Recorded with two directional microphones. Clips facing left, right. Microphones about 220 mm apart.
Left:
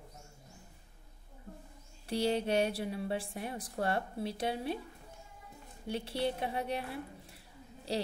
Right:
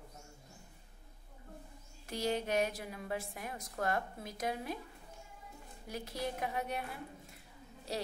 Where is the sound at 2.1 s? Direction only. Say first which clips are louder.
Left 4 dB; 30° left (ahead or behind).